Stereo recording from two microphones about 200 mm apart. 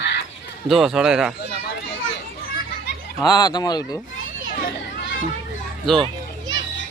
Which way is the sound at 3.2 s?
20° left (ahead or behind).